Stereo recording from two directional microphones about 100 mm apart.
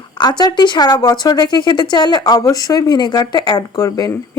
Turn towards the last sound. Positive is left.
turn(degrees=35)  # may be behind; listen again after turning